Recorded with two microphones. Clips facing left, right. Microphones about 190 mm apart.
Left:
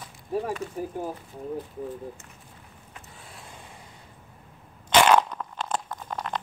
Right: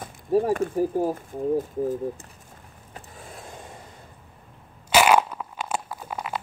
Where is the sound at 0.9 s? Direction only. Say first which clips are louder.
Right 8 dB; 35° right (ahead or behind).